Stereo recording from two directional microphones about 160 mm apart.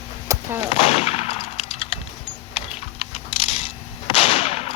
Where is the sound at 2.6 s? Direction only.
35° left (ahead or behind).